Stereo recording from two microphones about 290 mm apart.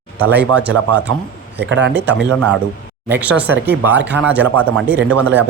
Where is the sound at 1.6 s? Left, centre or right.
Right.